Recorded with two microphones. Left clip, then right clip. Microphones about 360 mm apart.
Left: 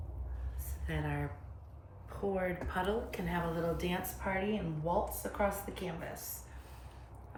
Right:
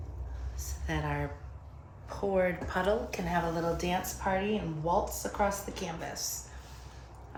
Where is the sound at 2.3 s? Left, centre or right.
Centre.